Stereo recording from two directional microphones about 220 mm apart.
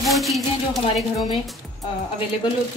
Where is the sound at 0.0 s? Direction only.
Centre (ahead or behind).